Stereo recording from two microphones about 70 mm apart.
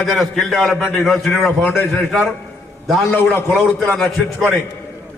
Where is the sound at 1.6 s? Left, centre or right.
Left.